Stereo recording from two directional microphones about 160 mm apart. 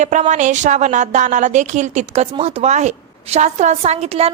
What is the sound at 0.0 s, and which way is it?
A woman's voice, 45° right (ahead or behind).